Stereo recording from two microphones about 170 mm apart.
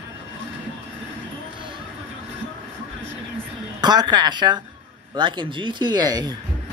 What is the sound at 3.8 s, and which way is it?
A man's voice, 25° right (ahead or behind).